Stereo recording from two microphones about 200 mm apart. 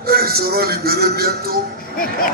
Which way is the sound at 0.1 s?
50° right (ahead or behind).